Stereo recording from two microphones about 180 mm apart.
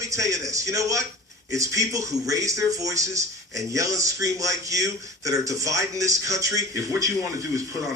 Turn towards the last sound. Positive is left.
turn(degrees=-20)  # may be behind; listen again after turning